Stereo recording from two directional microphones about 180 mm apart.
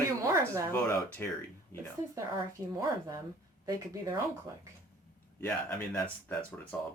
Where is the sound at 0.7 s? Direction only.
15° left (ahead or behind).